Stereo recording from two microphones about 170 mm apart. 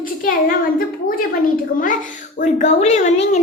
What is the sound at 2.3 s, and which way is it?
Speech, 45° left (ahead or behind).